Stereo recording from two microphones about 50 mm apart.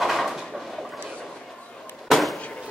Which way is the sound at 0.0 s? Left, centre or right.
Centre.